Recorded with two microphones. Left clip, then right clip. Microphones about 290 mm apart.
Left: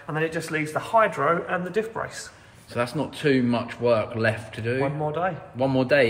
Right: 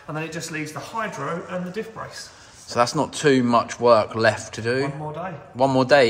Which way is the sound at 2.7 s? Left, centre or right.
Centre.